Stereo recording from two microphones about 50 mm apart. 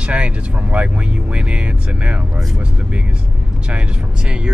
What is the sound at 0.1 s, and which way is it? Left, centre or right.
Speech, right.